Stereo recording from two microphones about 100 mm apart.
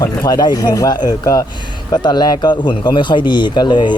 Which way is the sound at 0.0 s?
35° left (ahead or behind).